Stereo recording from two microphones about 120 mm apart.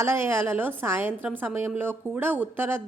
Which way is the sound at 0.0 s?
20° right (ahead or behind).